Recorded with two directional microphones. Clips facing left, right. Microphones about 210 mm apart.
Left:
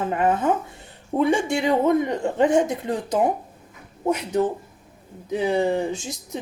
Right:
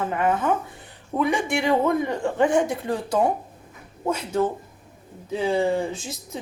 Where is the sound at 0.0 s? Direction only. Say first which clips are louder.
Left 2 dB; 25° left (ahead or behind).